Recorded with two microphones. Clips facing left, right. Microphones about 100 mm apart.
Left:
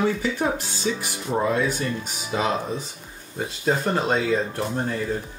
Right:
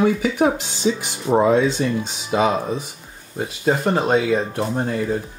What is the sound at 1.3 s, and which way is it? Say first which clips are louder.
Speech: right 8 dB; 45° right (ahead or behind).